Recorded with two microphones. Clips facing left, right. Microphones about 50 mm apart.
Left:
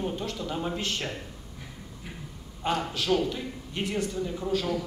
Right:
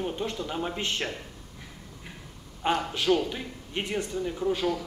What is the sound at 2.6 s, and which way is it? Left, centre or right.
A man's voice, right.